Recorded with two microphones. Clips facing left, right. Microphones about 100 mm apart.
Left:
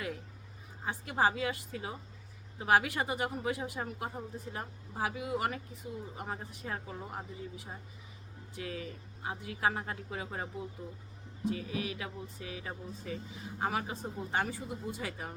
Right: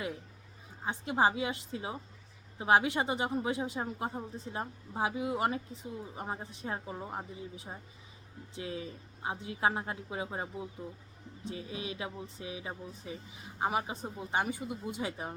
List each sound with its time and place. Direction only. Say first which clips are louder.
0.9 s speech: right 2 dB; 20° right (ahead or behind)